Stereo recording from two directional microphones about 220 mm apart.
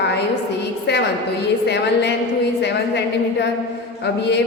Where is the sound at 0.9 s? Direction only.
50° left (ahead or behind).